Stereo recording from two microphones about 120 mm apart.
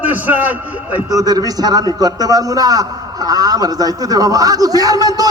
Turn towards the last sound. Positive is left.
turn(degrees=-30)  # may be behind; listen again after turning